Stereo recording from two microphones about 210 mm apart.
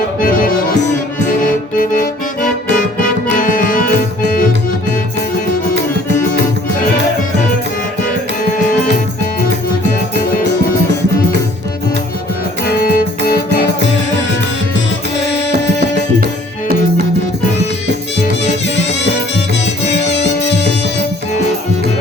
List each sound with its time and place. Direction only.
0.2 s music: 40° left (ahead or behind)
12.8 s music: 45° left (ahead or behind)
15.1 s music: 55° left (ahead or behind)
19.9 s music: 55° left (ahead or behind)